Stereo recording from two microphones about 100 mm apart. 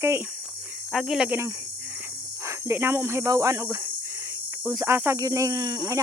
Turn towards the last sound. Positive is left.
turn(degrees=-35)  # may be behind; listen again after turning